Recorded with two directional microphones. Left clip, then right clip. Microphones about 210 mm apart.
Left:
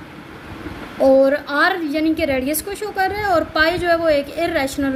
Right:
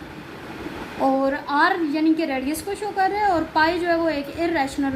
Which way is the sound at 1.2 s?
50° left (ahead or behind).